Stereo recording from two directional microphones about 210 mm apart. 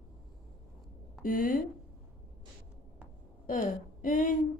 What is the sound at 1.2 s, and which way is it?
Speech, 40° left (ahead or behind).